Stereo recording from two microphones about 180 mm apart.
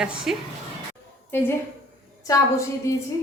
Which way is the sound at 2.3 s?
15° left (ahead or behind).